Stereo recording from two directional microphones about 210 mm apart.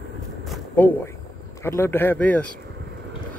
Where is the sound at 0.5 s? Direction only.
10° left (ahead or behind).